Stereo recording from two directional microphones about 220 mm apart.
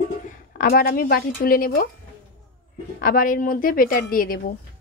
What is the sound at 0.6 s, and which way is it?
A woman's voice, 45° left (ahead or behind).